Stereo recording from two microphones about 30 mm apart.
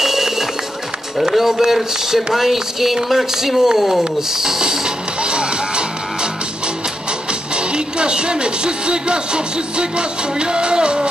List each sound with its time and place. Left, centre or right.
0.0 s music: centre
1.3 s speech: centre
4.6 s music: right
7.5 s speech: right